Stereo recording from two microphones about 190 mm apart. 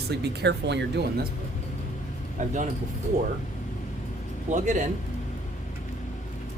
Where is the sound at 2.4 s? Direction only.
40° right (ahead or behind).